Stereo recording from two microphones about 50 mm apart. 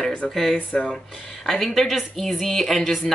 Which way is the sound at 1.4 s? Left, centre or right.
Centre.